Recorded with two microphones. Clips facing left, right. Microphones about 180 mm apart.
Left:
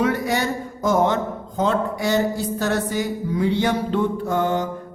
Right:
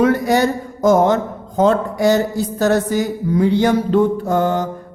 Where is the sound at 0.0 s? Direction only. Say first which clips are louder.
Right 7 dB; 40° right (ahead or behind).